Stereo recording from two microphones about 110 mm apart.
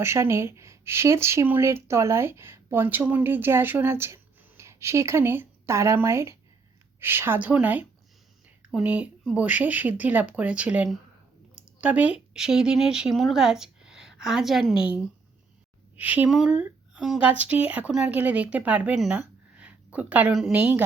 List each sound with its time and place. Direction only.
0.0 s a woman's voice: 20° right (ahead or behind); by 14.8 s 5° right (ahead or behind)
16.0 s speech: 15° right (ahead or behind)